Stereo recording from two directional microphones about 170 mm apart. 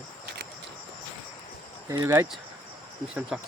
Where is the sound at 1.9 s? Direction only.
20° right (ahead or behind).